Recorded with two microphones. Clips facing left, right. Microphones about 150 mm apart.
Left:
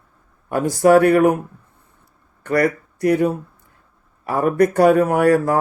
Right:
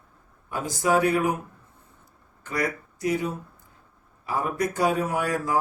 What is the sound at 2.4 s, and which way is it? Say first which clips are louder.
Speech: left 10 dB; 60° left (ahead or behind).